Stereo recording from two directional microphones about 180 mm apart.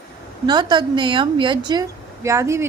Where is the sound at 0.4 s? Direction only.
25° right (ahead or behind).